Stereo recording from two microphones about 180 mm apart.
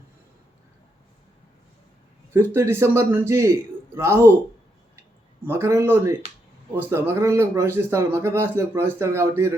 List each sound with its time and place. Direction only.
2.3 s a man's voice: 15° right (ahead or behind)
5.5 s a man's voice: 15° right (ahead or behind)